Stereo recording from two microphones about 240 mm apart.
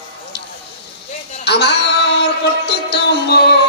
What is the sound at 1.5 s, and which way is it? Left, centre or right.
Music, left.